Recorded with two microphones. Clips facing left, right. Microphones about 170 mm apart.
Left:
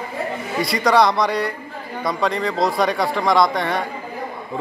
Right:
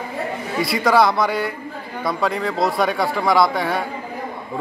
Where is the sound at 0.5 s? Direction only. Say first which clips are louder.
Even; centre (ahead or behind).